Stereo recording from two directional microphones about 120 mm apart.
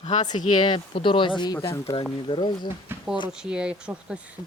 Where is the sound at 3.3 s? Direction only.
5° right (ahead or behind).